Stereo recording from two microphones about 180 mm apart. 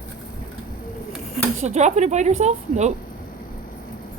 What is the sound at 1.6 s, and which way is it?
Speech, 40° right (ahead or behind).